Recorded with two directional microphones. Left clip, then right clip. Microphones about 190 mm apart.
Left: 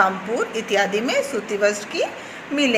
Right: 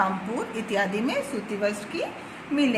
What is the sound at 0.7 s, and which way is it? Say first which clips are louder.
Speech: left 5 dB; 20° right (ahead or behind).